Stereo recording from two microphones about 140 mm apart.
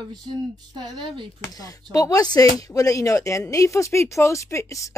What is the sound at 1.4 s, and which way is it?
Speech, 25° left (ahead or behind).